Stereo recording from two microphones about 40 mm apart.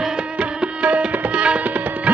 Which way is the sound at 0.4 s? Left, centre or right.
Right.